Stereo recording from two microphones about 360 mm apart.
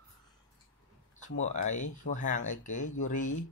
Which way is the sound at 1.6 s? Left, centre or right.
Centre.